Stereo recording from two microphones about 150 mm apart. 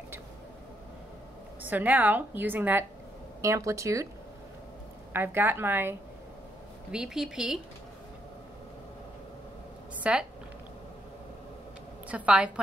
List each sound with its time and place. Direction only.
1.6 s a woman's voice: 10° right (ahead or behind)
5.1 s a woman's voice: 15° right (ahead or behind)
6.9 s a woman's voice: 5° right (ahead or behind)
10.0 s a woman's voice: 10° right (ahead or behind)
12.1 s a woman's voice: 5° right (ahead or behind)